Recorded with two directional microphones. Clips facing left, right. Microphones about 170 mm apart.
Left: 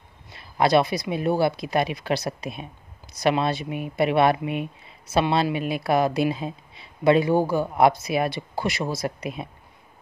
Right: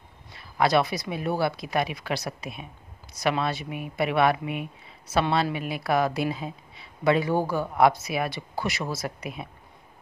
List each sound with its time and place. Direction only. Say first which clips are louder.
0.6 s speech: left 3 dB; 25° left (ahead or behind)